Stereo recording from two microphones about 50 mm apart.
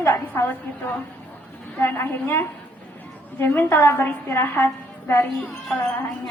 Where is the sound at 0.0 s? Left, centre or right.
Left.